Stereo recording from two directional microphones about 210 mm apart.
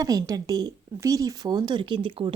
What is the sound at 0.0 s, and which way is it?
A woman's voice, 15° right (ahead or behind).